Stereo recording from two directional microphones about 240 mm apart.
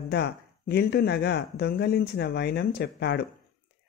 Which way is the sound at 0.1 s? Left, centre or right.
Left.